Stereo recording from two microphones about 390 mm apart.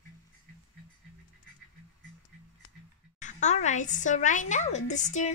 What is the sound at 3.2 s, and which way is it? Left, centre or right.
A woman's voice, centre.